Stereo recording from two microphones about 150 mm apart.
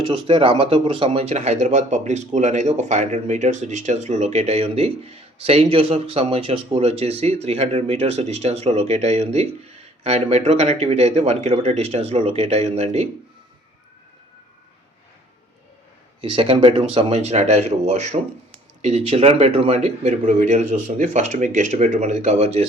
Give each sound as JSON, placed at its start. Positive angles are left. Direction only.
{"t": 0.0, "sound": "speech", "side_deg": -35}
{"t": 16.2, "sound": "speech", "side_deg": -35}